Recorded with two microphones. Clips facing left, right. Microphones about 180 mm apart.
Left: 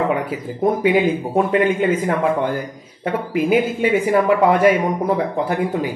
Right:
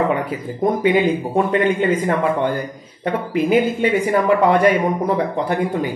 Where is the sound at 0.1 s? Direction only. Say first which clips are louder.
Even; 5° left (ahead or behind).